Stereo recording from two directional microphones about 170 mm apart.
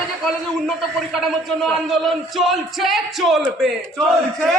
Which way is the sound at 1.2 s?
Centre (ahead or behind).